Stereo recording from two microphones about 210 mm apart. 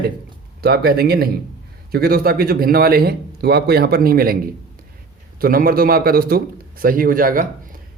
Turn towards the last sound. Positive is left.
turn(degrees=-40)  # may be behind; listen again after turning